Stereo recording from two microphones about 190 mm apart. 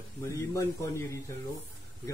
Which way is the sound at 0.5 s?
15° left (ahead or behind).